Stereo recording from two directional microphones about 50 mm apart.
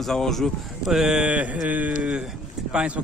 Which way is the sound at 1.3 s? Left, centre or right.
Right.